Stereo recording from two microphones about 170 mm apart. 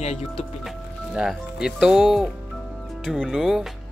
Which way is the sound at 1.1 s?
5° right (ahead or behind).